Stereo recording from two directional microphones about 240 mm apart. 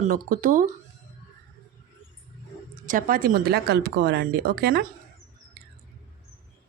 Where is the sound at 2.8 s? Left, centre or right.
Right.